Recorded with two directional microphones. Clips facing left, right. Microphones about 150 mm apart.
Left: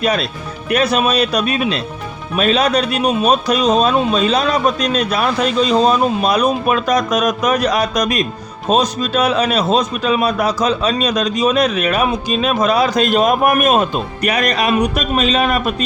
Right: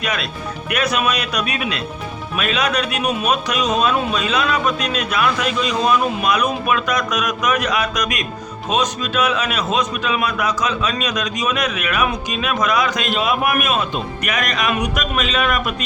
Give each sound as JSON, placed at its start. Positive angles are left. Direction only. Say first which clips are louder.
{"t": 0.0, "sound": "a man's voice", "louder": "left 6 dB", "side_deg": 35}